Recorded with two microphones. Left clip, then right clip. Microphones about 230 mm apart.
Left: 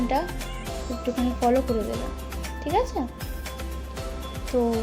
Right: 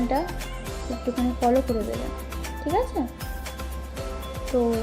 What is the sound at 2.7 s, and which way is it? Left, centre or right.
Speech, left.